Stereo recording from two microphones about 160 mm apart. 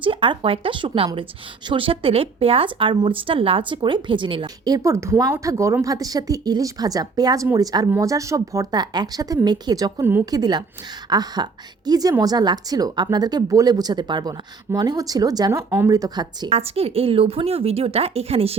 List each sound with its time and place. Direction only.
0.0 s a woman's voice: 30° right (ahead or behind)
16.5 s a woman's voice: 40° right (ahead or behind)